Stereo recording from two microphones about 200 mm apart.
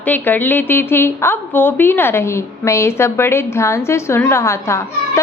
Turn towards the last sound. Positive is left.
turn(degrees=15)  # may be behind; listen again after turning